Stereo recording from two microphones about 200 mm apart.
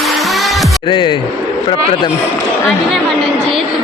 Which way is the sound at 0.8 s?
25° left (ahead or behind).